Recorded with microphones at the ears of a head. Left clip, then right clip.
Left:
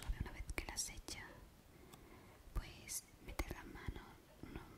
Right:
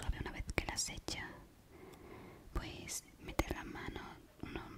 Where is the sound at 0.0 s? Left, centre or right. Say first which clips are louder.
Right 7 dB; right.